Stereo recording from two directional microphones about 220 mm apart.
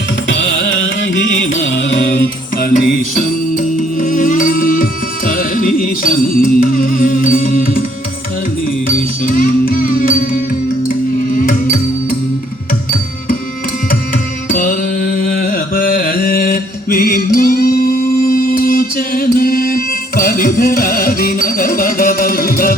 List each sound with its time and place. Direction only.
1.6 s music: 55° left (ahead or behind); by 7.9 s 40° left (ahead or behind)
8.9 s music: 40° left (ahead or behind)
14.5 s music: 40° left (ahead or behind)